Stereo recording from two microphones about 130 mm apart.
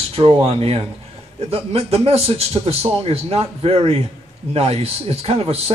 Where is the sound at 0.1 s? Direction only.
50° right (ahead or behind).